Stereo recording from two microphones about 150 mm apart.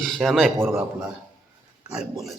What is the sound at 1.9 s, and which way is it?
Speech, centre (ahead or behind).